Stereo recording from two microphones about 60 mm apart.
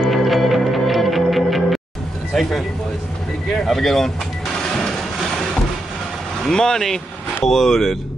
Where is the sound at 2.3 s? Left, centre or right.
Centre.